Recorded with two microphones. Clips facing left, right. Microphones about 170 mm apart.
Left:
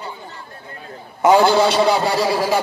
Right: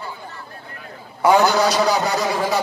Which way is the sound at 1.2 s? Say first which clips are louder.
Left 2 dB; 20° left (ahead or behind).